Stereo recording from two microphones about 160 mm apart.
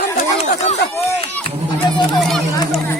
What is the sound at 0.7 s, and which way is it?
Speech, 40° left (ahead or behind).